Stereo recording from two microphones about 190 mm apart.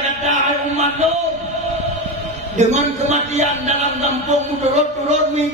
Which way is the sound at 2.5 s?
35° right (ahead or behind).